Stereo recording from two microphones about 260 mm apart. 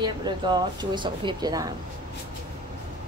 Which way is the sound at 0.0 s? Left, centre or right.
Centre.